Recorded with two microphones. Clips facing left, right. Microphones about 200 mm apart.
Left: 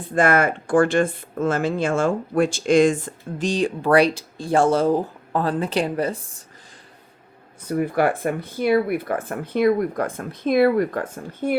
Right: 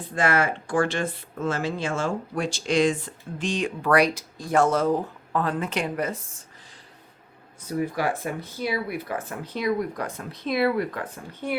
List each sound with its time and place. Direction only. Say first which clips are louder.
0.1 s speech: left 5 dB; 50° left (ahead or behind); by 6.2 s 30° left (ahead or behind)
7.7 s speech: left 6 dB; 60° left (ahead or behind)